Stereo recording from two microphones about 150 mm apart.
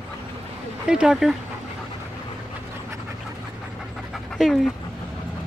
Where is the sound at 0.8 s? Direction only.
5° right (ahead or behind).